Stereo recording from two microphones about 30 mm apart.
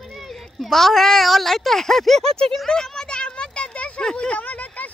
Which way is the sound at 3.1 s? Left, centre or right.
Left.